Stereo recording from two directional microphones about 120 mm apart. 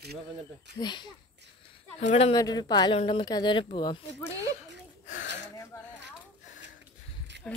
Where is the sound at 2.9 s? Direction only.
50° left (ahead or behind).